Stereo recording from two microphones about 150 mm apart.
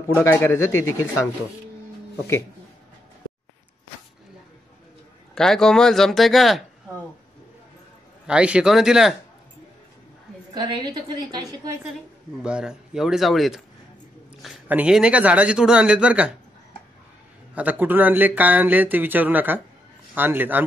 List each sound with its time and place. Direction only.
0.2 s speech: 15° left (ahead or behind)
5.3 s speech: 5° left (ahead or behind)
8.3 s speech: 5° right (ahead or behind)
10.5 s a woman's voice: 30° right (ahead or behind)
12.4 s speech: 5° right (ahead or behind)
17.6 s speech: 10° right (ahead or behind)